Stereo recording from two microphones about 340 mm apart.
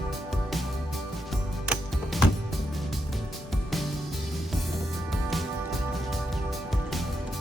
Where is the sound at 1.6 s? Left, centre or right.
Centre.